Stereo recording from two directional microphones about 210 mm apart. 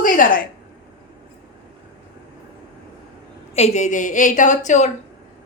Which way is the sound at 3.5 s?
30° left (ahead or behind).